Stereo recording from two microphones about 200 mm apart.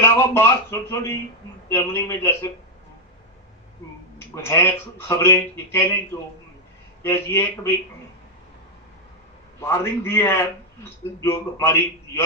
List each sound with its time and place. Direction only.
0.0 s speech: 10° left (ahead or behind)
4.4 s speech: 15° left (ahead or behind)
7.0 s speech: 10° left (ahead or behind)
9.6 s speech: 10° left (ahead or behind)